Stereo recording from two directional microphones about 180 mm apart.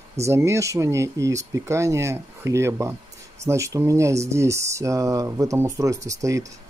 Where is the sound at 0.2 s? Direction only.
15° right (ahead or behind).